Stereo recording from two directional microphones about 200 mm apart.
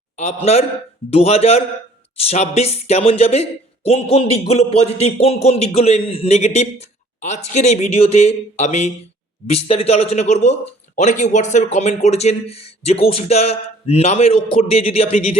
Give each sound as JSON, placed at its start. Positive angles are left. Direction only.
{"t": 0.2, "sound": "speech", "side_deg": 35}